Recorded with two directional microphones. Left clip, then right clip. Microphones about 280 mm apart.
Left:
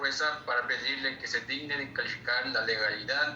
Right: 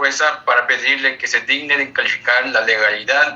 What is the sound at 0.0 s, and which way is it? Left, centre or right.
A man's voice, right.